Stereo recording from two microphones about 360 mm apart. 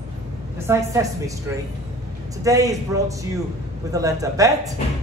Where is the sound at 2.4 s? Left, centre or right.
Centre.